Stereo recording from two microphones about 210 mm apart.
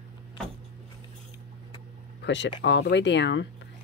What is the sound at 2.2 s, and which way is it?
Speech, 55° left (ahead or behind).